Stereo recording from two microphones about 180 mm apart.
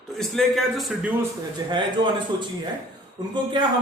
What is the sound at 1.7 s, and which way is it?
A man's voice, 25° right (ahead or behind).